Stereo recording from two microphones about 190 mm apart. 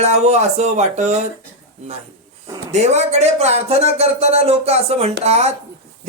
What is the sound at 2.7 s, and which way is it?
Speech, 35° right (ahead or behind).